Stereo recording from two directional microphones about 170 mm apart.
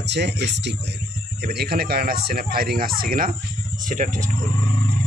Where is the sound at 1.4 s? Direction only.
65° right (ahead or behind); by 4.3 s 45° right (ahead or behind).